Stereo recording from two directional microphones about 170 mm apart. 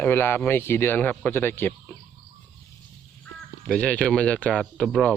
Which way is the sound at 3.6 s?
5° left (ahead or behind).